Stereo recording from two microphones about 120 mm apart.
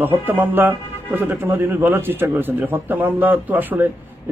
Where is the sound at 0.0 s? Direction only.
15° right (ahead or behind).